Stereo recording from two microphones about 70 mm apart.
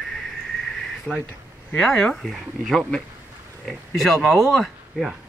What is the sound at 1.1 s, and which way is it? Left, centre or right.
Speech, centre.